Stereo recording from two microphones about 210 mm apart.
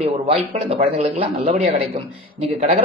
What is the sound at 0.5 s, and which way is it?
Speech, 25° right (ahead or behind).